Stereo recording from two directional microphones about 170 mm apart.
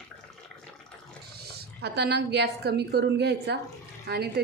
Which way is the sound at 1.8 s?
75° right (ahead or behind).